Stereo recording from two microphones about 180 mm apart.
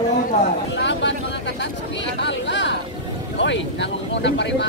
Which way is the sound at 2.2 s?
80° left.